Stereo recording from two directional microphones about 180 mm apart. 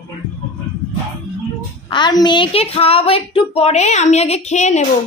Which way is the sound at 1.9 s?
25° left (ahead or behind).